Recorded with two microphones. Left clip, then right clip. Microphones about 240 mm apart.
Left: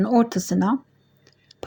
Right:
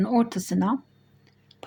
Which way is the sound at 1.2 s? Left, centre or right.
Centre.